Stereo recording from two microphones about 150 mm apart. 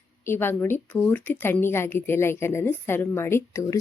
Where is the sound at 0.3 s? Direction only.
15° left (ahead or behind).